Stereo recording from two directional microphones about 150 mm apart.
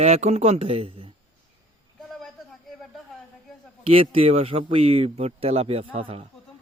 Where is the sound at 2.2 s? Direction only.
Centre (ahead or behind).